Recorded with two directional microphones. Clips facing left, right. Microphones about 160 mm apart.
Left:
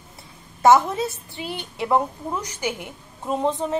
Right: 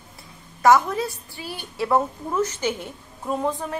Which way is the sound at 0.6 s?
25° left (ahead or behind).